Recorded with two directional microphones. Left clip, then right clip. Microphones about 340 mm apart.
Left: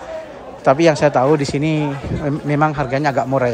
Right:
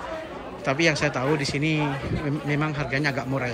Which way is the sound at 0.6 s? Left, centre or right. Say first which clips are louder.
Left 10 dB; centre.